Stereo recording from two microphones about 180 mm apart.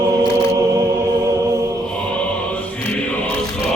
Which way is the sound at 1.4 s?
15° right (ahead or behind).